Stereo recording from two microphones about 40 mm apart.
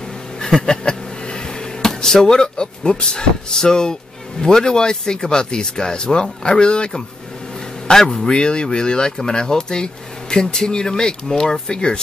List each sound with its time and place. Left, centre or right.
0.6 s a sound: left
4.4 s speech: centre
7.9 s a man's voice: centre
8.3 s speech: left